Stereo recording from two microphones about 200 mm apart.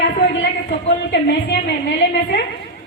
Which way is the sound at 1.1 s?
60° left (ahead or behind).